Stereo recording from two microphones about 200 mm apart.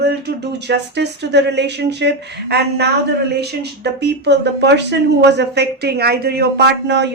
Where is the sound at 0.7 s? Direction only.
60° right (ahead or behind).